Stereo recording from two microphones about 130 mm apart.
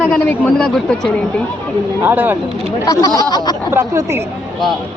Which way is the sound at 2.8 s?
30° left (ahead or behind).